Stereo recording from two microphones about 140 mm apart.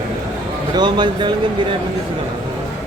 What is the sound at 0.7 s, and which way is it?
Speech, 35° right (ahead or behind).